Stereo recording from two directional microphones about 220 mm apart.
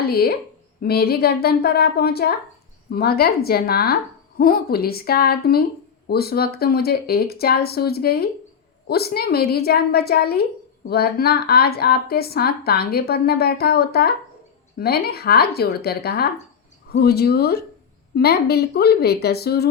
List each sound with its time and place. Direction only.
0.0 s speech: 45° left (ahead or behind)